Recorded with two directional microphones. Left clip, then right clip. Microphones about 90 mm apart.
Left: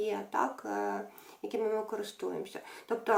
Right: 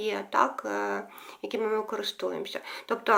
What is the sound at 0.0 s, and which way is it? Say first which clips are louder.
A woman's voice: right 6 dB; 25° left (ahead or behind).